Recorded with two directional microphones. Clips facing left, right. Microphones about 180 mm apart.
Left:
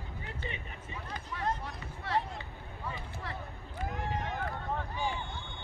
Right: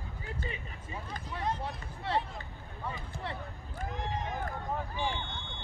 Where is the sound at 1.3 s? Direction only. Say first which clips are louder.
Right 1 dB; 30° right (ahead or behind).